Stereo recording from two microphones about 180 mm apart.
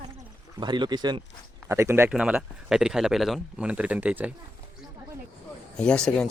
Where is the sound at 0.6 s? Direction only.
25° right (ahead or behind).